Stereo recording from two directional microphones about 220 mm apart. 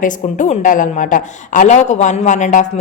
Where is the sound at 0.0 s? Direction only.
35° left (ahead or behind).